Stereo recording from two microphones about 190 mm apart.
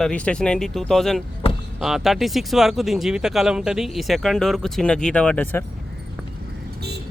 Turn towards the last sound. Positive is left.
turn(degrees=10)  # may be behind; listen again after turning